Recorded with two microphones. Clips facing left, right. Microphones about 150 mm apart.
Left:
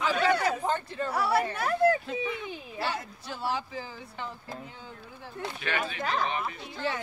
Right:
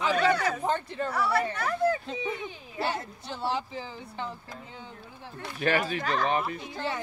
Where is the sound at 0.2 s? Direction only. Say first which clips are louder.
Even; 10° left (ahead or behind).